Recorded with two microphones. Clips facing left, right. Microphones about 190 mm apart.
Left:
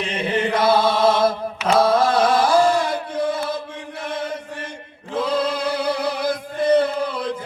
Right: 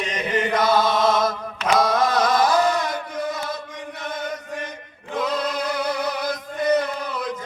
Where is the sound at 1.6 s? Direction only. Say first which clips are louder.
Left 3 dB; 30° left (ahead or behind).